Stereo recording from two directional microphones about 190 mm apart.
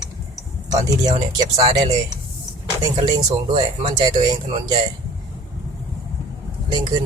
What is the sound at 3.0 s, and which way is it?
Speech, 25° right (ahead or behind).